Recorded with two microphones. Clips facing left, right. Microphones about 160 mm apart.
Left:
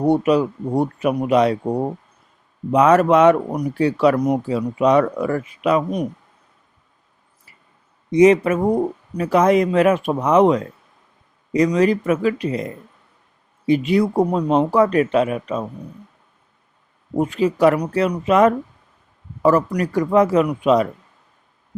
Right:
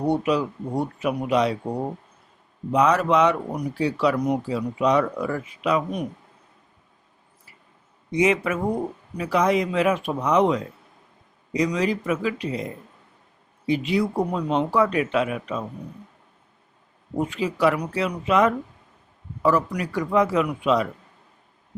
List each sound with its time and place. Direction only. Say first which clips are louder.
0.3 s speech: left 6 dB; 50° left (ahead or behind)
2.7 s speech: left 6 dB; 55° left (ahead or behind)
8.1 s speech: left 8 dB; 40° left (ahead or behind)
13.7 s speech: left 6 dB; 50° left (ahead or behind)
17.2 s speech: left 6 dB; 40° left (ahead or behind)